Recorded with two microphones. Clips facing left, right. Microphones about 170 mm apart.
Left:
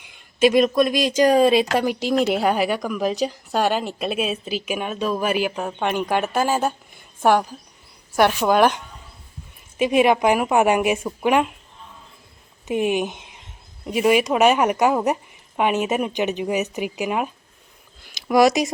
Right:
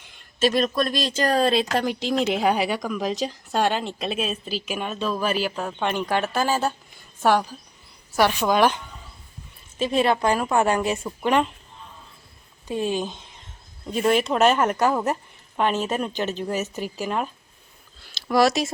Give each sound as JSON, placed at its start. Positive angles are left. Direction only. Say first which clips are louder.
{"t": 0.0, "sound": "a woman's voice", "louder": "left 5 dB", "side_deg": 15}
{"t": 9.7, "sound": "speech", "louder": "left 4 dB", "side_deg": 15}
{"t": 12.6, "sound": "speech", "louder": "left 4 dB", "side_deg": 20}
{"t": 18.0, "sound": "a sound", "louder": "left 3 dB", "side_deg": 15}